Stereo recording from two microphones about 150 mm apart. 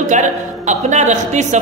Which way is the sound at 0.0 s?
55° right (ahead or behind).